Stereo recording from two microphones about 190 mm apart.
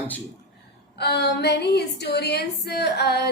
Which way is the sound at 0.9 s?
60° left (ahead or behind).